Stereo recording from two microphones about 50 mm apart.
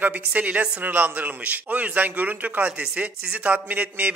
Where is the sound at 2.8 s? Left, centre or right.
Centre.